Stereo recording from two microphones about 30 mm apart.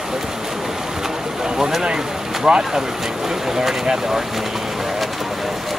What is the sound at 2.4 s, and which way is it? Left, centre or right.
Speech, right.